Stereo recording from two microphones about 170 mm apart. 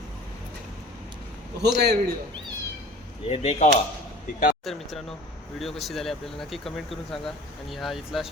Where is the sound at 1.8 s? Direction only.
70° right (ahead or behind).